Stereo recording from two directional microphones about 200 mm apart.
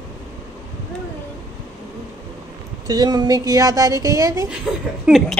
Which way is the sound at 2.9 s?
20° right (ahead or behind).